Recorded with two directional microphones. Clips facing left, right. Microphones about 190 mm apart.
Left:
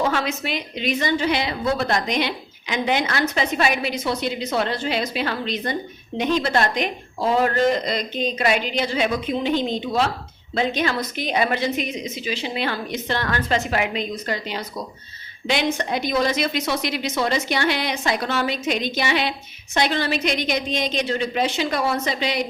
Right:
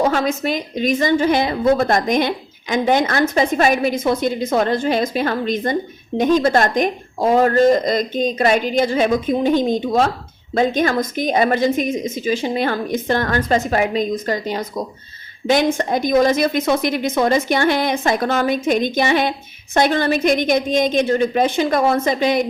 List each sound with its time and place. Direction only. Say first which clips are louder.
0.0 s a woman's voice: right 5 dB; 45° right (ahead or behind)